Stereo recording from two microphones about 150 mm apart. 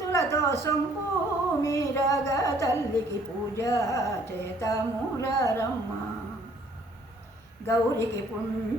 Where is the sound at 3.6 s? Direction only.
20° left (ahead or behind).